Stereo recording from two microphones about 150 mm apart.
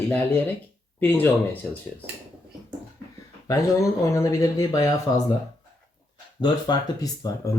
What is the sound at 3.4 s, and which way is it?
Speech, 20° left (ahead or behind).